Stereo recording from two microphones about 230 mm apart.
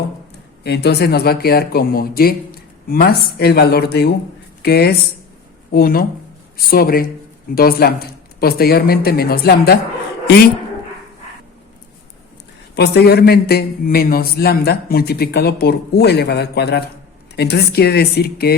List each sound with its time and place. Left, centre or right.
0.6 s a man's voice: left
12.7 s a man's voice: left